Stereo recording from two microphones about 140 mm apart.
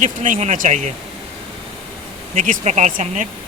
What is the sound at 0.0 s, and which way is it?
Hair dryer, 60° right (ahead or behind).